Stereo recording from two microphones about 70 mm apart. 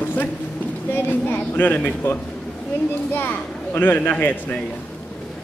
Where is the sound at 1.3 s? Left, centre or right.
Left.